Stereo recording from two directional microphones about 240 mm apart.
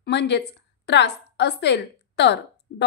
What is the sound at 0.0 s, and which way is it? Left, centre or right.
A woman's voice, left.